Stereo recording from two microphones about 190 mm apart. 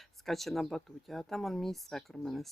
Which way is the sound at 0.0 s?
Centre (ahead or behind).